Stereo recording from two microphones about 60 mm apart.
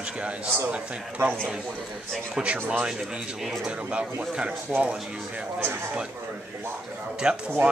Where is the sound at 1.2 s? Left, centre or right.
Right.